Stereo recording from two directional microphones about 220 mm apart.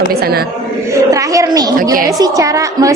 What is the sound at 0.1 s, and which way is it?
Speech, 45° right (ahead or behind).